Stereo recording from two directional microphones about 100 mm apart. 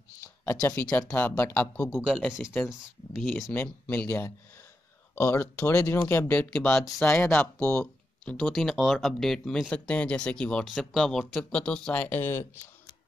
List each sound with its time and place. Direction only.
0.2 s speech: 20° left (ahead or behind)
2.0 s speech: 5° right (ahead or behind)
3.5 s speech: 20° left (ahead or behind)
6.5 s speech: 5° left (ahead or behind)
7.8 s speech: 10° left (ahead or behind)